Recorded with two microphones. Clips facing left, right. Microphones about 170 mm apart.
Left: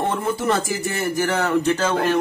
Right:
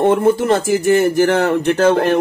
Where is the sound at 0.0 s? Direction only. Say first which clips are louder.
Right 9 dB; 50° right (ahead or behind).